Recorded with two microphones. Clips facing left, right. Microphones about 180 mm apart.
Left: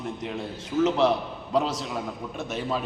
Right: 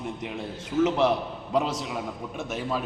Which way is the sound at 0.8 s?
15° right (ahead or behind).